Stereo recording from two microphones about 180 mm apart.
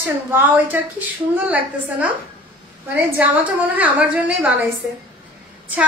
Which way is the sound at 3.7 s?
10° right (ahead or behind).